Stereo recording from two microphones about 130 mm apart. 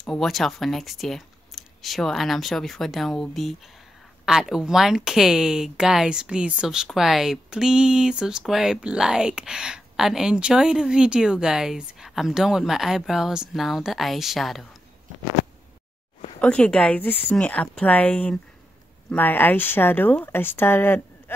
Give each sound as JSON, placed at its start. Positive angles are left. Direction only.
{"t": 0.0, "sound": "speech", "side_deg": 0}
{"t": 16.3, "sound": "a woman's voice", "side_deg": 10}